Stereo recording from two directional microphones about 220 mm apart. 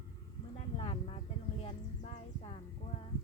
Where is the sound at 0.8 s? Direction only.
25° left (ahead or behind).